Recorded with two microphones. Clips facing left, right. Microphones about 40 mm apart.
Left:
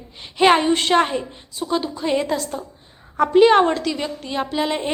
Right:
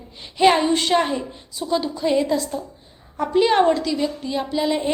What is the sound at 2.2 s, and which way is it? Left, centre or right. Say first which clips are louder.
A woman's voice: right 2 dB; left.